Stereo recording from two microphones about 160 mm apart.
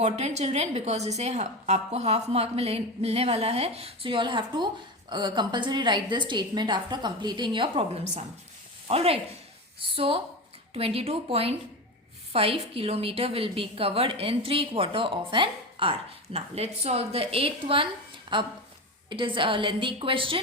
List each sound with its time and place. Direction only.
0.0 s a woman's voice: 45° right (ahead or behind)
8.9 s a woman's voice: 40° right (ahead or behind)